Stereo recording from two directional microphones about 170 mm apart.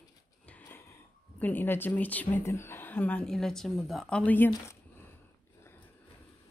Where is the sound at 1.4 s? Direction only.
10° left (ahead or behind).